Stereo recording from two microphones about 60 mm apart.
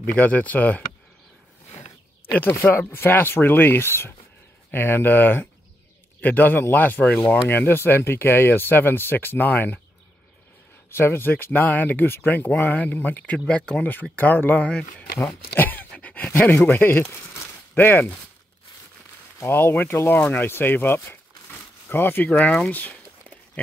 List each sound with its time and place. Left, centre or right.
0.0 s speech: left
2.2 s speech: left
10.9 s speech: left
13.5 s speech: centre
14.1 s speech: left
14.7 s speech: centre
15.5 s a sound: left
16.3 s speech: left
17.3 s a sound: left
19.4 s speech: left
22.3 s speech: centre